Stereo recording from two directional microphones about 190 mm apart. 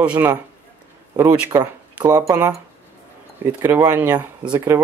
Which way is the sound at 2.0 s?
10° right (ahead or behind).